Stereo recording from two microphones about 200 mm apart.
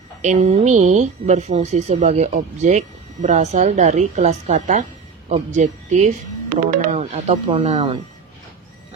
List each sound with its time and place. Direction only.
0.2 s speech: 35° right (ahead or behind)